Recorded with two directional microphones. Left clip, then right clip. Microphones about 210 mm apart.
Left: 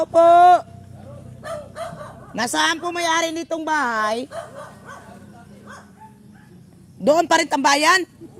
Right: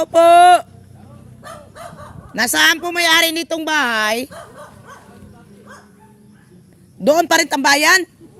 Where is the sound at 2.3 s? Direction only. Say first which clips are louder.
Right 6 dB; 25° right (ahead or behind).